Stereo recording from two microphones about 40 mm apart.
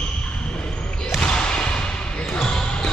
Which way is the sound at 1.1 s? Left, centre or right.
Left.